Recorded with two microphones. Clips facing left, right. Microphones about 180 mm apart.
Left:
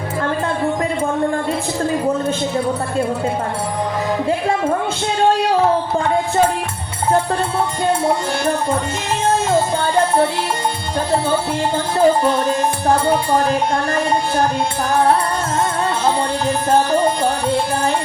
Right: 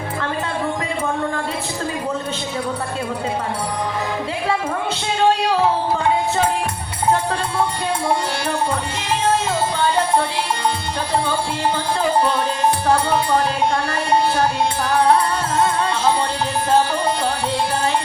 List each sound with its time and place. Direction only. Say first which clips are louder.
9.5 s music: left 3 dB; 50° left (ahead or behind)
11.9 s music: left 7 dB; 45° left (ahead or behind)